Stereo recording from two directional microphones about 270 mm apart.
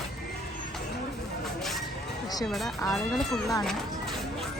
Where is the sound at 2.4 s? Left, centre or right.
Centre.